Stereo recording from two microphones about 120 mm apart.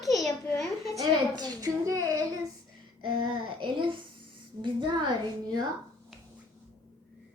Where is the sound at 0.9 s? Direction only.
35° right (ahead or behind).